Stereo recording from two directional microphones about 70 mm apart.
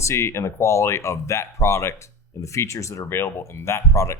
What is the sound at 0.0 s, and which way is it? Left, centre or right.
Speech, left.